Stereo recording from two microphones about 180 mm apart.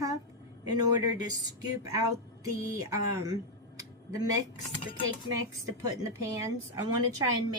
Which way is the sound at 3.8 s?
20° right (ahead or behind).